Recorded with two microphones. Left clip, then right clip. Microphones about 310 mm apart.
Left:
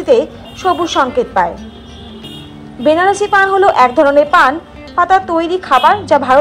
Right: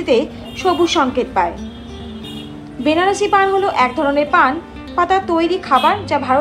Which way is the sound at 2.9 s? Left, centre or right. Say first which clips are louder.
Left 4 dB; left.